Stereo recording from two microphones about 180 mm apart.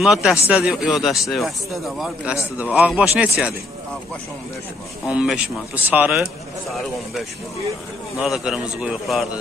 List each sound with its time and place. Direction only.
0.0 s speech: 5° right (ahead or behind)
5.0 s speech: 5° right (ahead or behind)